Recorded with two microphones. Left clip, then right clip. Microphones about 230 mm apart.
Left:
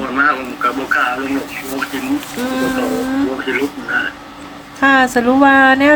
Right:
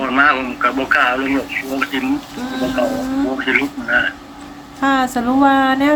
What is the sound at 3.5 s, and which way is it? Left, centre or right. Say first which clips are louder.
Speech: right 2 dB; right.